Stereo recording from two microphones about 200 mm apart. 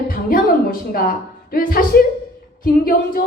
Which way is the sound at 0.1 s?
45° left (ahead or behind).